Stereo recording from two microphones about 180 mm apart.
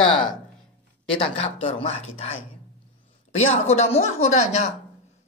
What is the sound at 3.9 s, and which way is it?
Speech, 35° left (ahead or behind).